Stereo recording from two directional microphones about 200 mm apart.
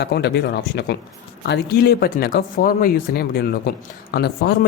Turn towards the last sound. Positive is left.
turn(degrees=55)  # may be behind; listen again after turning